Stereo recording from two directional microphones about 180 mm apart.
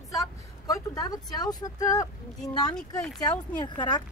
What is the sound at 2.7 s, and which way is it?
Speech, 5° left (ahead or behind).